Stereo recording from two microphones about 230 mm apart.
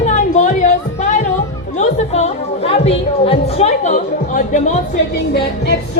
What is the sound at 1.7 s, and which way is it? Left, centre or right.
A woman's voice, left.